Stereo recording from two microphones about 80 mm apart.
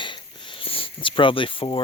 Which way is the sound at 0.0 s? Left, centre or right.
Left.